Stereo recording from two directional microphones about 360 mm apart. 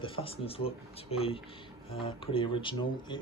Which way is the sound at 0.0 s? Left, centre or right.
Centre.